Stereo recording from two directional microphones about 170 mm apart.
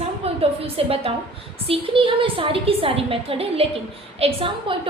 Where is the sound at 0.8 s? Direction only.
35° right (ahead or behind).